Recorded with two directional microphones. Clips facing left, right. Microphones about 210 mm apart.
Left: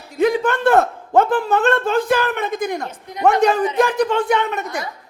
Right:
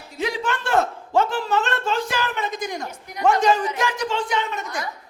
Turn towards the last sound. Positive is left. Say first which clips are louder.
# left 6 dB
turn(degrees=60)  # may be behind; listen again after turning